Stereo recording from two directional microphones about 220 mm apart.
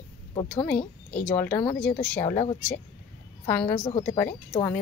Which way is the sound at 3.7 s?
25° left (ahead or behind).